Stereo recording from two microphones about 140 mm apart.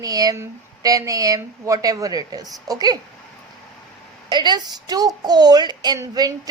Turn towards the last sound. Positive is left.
turn(degrees=-25)  # may be behind; listen again after turning